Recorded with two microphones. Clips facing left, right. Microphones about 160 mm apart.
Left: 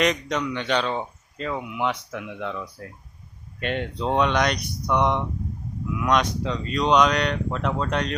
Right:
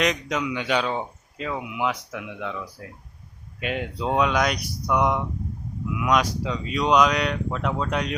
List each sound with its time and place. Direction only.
0.0 s speech: centre (ahead or behind)